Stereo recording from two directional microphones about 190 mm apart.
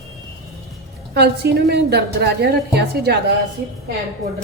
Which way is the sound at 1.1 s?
60° right (ahead or behind).